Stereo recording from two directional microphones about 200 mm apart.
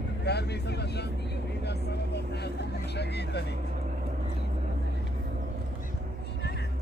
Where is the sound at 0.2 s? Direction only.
55° left (ahead or behind).